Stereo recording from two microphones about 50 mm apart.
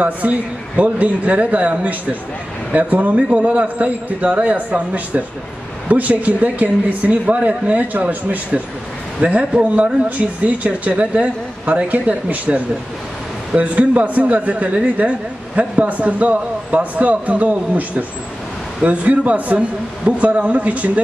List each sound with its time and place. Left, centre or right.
0.0 s a woman's voice: right
9.2 s a woman's voice: right
10.0 s a woman's voice: right